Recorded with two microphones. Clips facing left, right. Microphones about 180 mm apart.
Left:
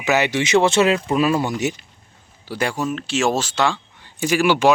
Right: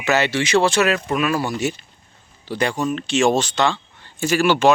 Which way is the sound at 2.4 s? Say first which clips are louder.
Right 1 dB; 5° left (ahead or behind).